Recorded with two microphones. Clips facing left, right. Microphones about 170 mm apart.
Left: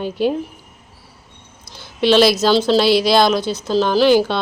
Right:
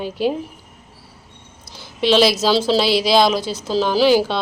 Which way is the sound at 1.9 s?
Centre (ahead or behind).